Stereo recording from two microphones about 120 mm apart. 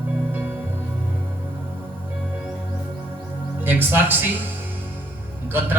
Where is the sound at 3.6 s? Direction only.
15° right (ahead or behind).